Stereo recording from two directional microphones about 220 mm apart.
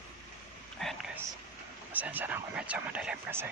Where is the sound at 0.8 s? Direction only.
Centre (ahead or behind).